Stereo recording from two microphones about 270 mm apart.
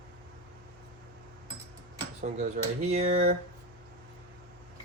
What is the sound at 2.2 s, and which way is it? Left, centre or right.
Speech, right.